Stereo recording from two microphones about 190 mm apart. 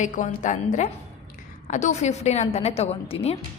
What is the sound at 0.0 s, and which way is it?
A woman's voice, 40° left (ahead or behind).